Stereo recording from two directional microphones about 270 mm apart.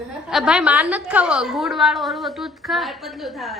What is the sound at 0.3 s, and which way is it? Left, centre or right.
A woman's voice, centre.